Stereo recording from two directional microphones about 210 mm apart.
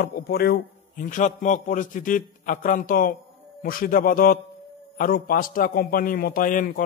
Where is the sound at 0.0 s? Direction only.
45° left (ahead or behind).